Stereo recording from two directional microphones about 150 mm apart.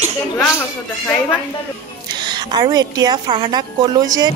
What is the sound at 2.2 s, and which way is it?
A woman's voice, 25° right (ahead or behind).